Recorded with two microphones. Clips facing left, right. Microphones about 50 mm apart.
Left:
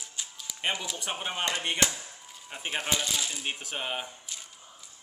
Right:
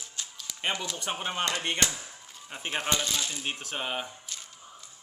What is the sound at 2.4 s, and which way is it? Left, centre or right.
A man's voice, centre.